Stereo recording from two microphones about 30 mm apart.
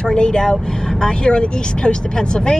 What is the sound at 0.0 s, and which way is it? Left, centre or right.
Speech, left.